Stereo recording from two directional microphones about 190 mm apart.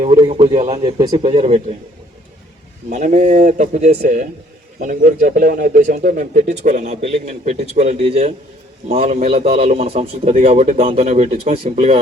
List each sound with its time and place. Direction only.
0.0 s speech: 30° right (ahead or behind)
0.8 s speech: 25° right (ahead or behind)
2.9 s speech: 40° right (ahead or behind)